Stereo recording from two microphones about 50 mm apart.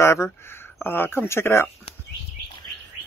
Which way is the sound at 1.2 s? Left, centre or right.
Left.